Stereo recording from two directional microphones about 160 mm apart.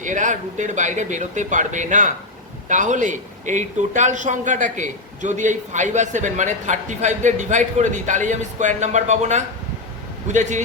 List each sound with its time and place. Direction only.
0.0 s speech: 50° right (ahead or behind)